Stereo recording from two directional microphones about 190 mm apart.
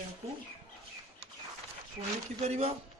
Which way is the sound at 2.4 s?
35° right (ahead or behind).